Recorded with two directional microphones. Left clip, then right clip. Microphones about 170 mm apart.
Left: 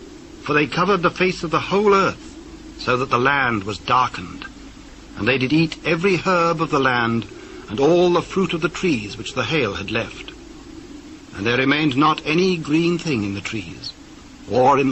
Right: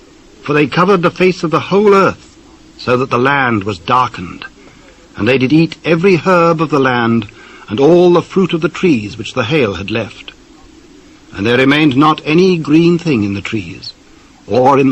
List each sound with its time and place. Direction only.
0.4 s a man's voice: 45° right (ahead or behind)
11.3 s a man's voice: 45° right (ahead or behind)